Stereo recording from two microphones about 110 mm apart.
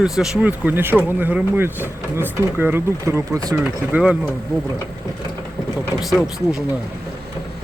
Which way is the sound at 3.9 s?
5° right (ahead or behind).